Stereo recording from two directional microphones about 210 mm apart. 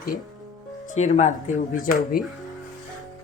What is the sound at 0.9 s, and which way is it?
Speech, 35° left (ahead or behind).